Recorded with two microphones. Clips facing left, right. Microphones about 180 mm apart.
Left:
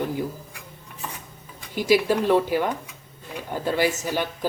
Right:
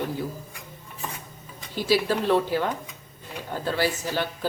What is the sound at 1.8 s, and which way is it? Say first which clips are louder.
Speech: left 3 dB; 15° left (ahead or behind).